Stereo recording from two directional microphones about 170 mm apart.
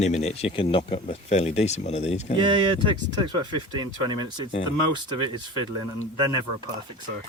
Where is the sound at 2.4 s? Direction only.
30° right (ahead or behind).